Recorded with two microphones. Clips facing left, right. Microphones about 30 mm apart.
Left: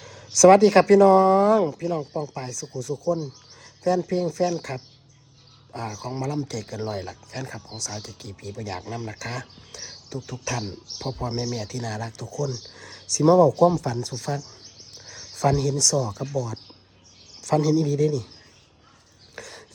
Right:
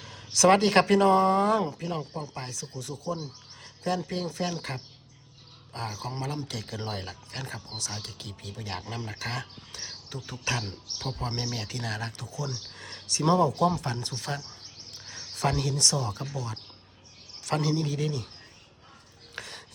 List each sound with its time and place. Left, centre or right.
0.0 s speech: right
1.7 s speech: right
2.0 s speech: right
2.5 s speech: right
6.5 s speech: right
8.2 s speech: right
19.4 s a sound: right